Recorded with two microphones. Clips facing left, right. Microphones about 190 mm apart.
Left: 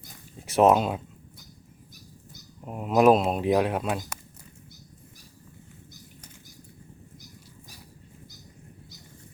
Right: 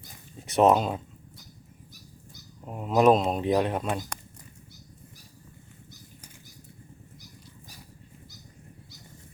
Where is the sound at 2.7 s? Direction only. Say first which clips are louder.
Left 1 dB; 5° left (ahead or behind).